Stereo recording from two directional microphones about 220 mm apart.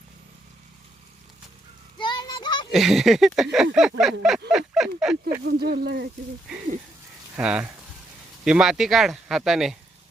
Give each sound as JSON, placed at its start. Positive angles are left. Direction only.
{"t": 2.0, "sound": "a sound", "side_deg": 20}
{"t": 2.7, "sound": "speech", "side_deg": 0}
{"t": 5.6, "sound": "speech", "side_deg": -45}
{"t": 7.3, "sound": "speech", "side_deg": -5}